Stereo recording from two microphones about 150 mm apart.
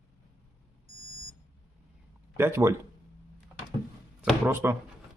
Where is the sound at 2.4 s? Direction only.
15° right (ahead or behind).